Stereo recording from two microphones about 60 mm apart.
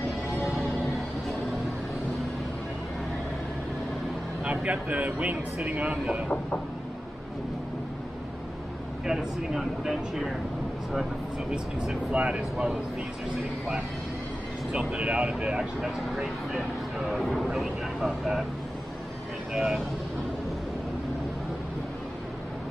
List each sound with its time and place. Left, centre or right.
0.4 s music: centre
4.5 s speech: right
6.2 s a sound: centre
9.0 s speech: centre
11.5 s speech: centre
14.7 s speech: centre
15.8 s speech: centre
19.5 s speech: centre